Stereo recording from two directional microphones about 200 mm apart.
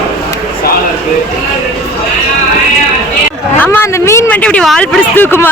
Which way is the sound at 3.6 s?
10° left (ahead or behind).